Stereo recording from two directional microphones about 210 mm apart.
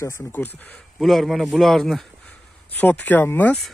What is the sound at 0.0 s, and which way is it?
A man's voice, 15° left (ahead or behind).